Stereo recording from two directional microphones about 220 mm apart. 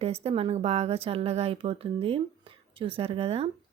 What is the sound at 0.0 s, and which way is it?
Speech, 25° right (ahead or behind).